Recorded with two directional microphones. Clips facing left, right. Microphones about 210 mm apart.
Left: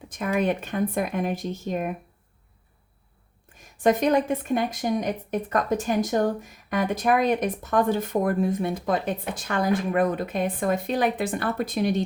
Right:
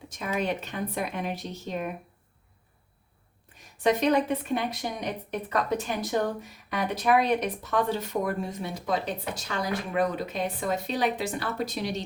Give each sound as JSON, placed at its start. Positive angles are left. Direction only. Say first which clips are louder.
{"t": 0.1, "sound": "speech", "louder": "left 5 dB", "side_deg": 50}
{"t": 3.5, "sound": "speech", "louder": "left 3 dB", "side_deg": 50}